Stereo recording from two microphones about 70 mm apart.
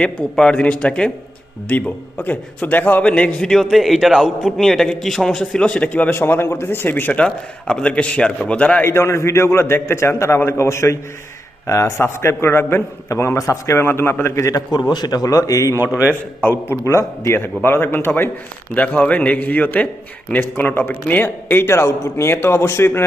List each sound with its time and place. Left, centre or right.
0.0 s speech: centre
3.5 s a man's voice: centre; by 7.2 s left
7.2 s speech: centre
8.8 s a man's voice: left
13.8 s a man's voice: left
14.7 s a man's voice: left
15.3 s a man's voice: left
16.4 s speech: left
16.8 s a man's voice: left
18.7 s a man's voice: centre; by 23.0 s left